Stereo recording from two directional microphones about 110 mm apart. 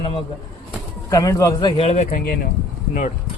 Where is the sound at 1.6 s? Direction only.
45° left (ahead or behind).